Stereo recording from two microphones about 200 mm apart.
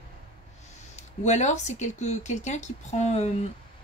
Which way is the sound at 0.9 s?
35° left (ahead or behind).